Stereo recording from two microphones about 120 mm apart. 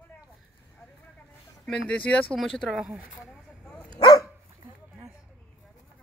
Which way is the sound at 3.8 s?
35° left (ahead or behind).